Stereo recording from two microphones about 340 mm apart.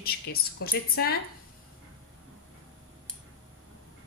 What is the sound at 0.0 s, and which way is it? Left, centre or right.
A woman's voice, left.